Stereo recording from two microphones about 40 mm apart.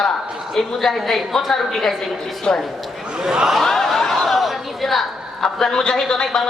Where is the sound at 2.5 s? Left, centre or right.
Centre.